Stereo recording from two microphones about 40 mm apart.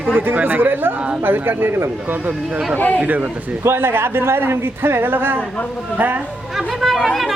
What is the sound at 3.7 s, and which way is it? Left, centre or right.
Speech, right.